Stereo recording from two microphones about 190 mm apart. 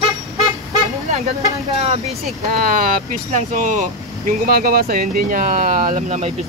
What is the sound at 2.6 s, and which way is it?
Speech, 45° right (ahead or behind).